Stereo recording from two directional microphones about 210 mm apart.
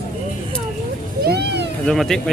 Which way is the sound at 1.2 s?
50° right (ahead or behind).